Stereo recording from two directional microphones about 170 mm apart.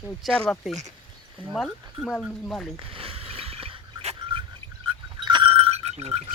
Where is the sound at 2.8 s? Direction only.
30° right (ahead or behind).